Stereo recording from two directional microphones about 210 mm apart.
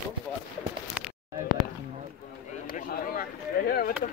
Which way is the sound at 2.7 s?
40° left (ahead or behind).